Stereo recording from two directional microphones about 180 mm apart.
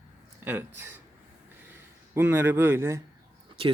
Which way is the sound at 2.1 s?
10° right (ahead or behind).